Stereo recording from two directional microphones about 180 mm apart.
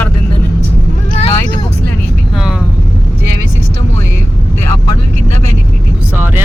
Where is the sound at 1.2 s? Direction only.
30° left (ahead or behind).